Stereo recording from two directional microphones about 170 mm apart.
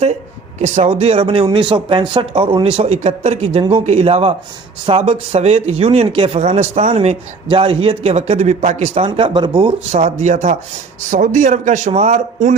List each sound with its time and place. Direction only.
0.6 s speech: 35° right (ahead or behind)